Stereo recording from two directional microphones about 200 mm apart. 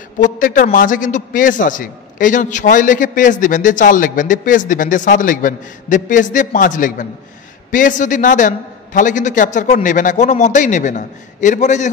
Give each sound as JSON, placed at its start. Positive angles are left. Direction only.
{"t": 0.2, "sound": "a man's voice", "side_deg": 40}